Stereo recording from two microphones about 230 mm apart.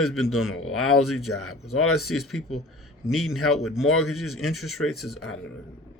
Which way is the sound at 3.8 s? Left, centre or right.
Left.